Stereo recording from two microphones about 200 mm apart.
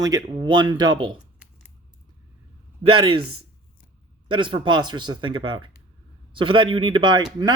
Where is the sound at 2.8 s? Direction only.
25° right (ahead or behind).